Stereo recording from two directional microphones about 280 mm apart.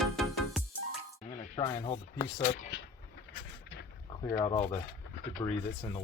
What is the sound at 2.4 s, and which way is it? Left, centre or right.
Speech, left.